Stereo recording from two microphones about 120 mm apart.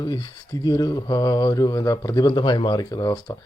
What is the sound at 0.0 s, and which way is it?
A man's voice, 35° left (ahead or behind).